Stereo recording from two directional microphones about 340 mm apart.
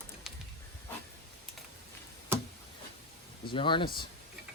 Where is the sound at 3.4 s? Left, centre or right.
Centre.